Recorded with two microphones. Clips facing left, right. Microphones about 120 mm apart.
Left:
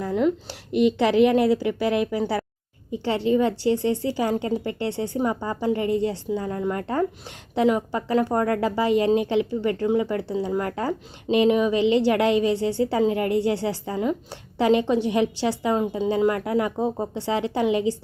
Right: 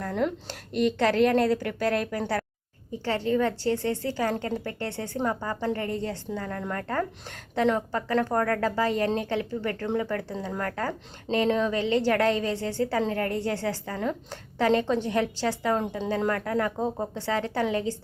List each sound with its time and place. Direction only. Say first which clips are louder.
0.0 s speech: left 5 dB; 5° left (ahead or behind)
0.7 s speech: left 4 dB; 15° left (ahead or behind)